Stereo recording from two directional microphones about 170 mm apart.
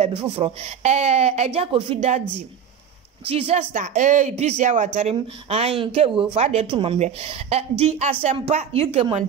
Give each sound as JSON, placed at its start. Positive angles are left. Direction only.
{"t": 0.0, "sound": "a woman's voice", "side_deg": -35}
{"t": 3.3, "sound": "a woman's voice", "side_deg": -35}